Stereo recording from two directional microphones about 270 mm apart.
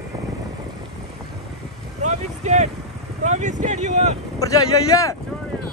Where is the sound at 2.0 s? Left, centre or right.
Right.